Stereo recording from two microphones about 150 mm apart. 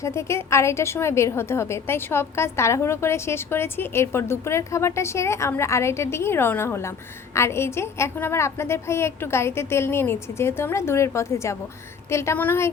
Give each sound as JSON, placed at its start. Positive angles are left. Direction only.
{"t": 0.0, "sound": "a woman's voice", "side_deg": 20}